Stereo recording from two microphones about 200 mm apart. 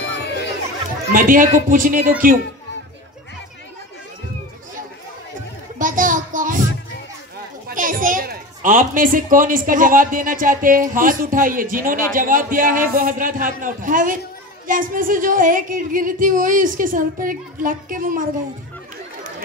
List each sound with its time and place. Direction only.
0.2 s chatter: 55° left (ahead or behind)
1.1 s a child's voice: 45° right (ahead or behind)
5.8 s a sound: 40° right (ahead or behind)
7.6 s a child's voice: 45° right (ahead or behind)